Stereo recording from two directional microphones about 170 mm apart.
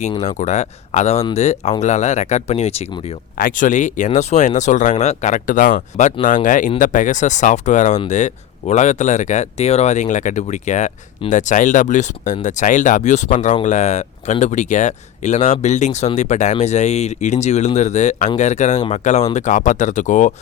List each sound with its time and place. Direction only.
0.2 s speech: 40° left (ahead or behind)
3.3 s speech: 55° left (ahead or behind)